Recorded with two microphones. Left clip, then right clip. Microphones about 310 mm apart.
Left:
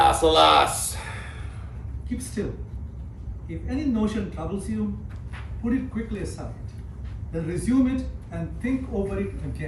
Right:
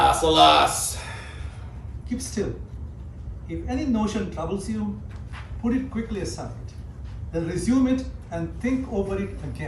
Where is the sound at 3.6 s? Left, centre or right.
Centre.